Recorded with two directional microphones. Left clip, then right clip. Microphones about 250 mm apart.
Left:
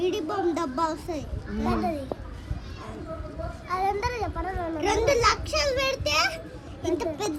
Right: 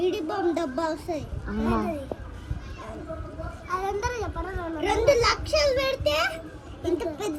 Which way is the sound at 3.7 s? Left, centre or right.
Left.